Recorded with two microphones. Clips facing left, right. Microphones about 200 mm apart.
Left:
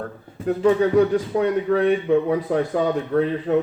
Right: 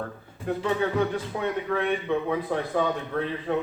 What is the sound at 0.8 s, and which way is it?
A man's voice, 45° left (ahead or behind).